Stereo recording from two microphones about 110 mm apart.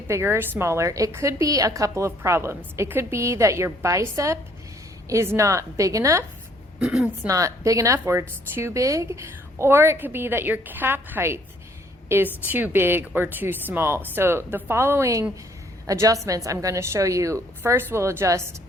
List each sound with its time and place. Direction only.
0.1 s a woman's voice: 20° right (ahead or behind)
6.7 s speech: 10° right (ahead or behind)
7.3 s a woman's voice: 30° right (ahead or behind)